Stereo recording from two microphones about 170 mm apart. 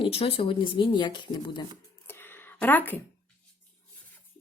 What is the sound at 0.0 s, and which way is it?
Speech, 30° left (ahead or behind).